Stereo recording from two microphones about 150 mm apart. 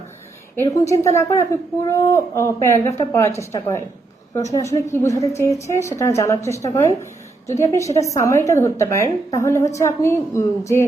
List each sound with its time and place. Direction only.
0.5 s a woman's voice: 20° left (ahead or behind)